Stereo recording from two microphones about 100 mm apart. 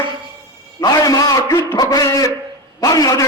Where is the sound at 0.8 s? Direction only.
35° left (ahead or behind).